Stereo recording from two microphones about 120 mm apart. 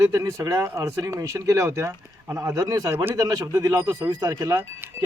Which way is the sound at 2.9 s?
20° right (ahead or behind).